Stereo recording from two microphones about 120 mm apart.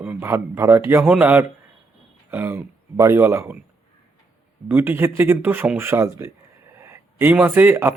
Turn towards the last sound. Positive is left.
turn(degrees=-15)  # may be behind; listen again after turning